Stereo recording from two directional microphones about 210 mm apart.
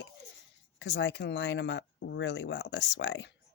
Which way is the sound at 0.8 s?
60° left (ahead or behind).